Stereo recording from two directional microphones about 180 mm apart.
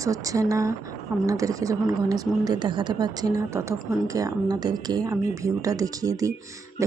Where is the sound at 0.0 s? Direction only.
20° right (ahead or behind).